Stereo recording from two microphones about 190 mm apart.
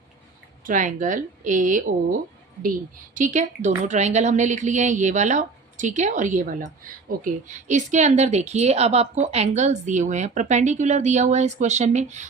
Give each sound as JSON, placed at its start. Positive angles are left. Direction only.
{"t": 0.6, "sound": "a woman's voice", "side_deg": -40}
{"t": 3.2, "sound": "a woman's voice", "side_deg": -40}